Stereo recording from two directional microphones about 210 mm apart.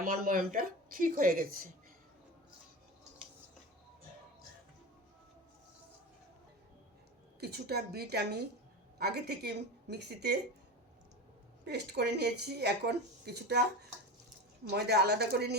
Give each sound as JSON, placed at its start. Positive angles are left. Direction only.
{"t": 0.0, "sound": "speech", "side_deg": -45}
{"t": 7.3, "sound": "speech", "side_deg": -50}
{"t": 11.6, "sound": "speech", "side_deg": -50}